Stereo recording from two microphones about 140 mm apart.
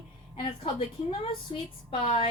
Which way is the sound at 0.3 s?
40° left (ahead or behind).